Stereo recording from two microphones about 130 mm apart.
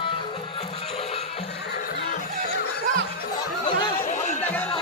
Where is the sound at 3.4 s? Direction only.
35° left (ahead or behind).